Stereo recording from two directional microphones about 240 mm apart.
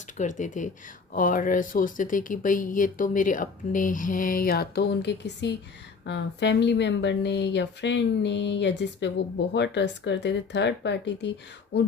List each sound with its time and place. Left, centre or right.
0.2 s a woman's voice: left